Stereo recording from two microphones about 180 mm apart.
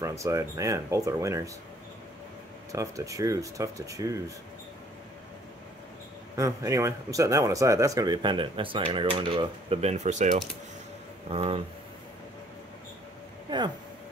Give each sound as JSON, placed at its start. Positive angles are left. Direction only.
{"t": 0.0, "sound": "speech", "side_deg": -15}
{"t": 2.7, "sound": "speech", "side_deg": -15}
{"t": 6.3, "sound": "speech", "side_deg": -15}